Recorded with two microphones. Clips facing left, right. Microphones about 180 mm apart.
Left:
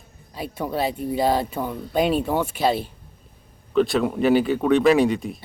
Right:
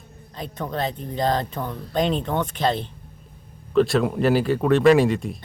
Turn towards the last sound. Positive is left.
turn(degrees=0)  # may be behind; listen again after turning